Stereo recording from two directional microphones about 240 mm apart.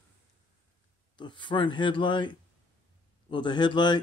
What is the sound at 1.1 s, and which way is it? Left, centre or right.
A man's voice, centre.